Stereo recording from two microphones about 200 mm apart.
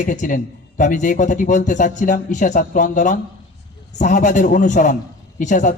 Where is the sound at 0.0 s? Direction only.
40° left (ahead or behind).